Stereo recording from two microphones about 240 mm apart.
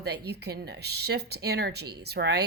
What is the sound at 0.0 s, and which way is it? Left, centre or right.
Speech, right.